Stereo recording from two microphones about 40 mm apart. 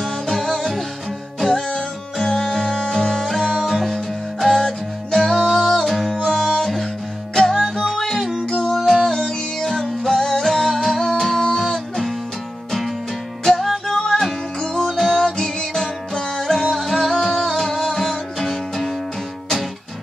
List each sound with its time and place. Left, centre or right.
0.0 s music: centre
5.9 s music: centre
6.1 s music: centre
7.3 s music: centre
13.4 s music: centre
14.9 s music: centre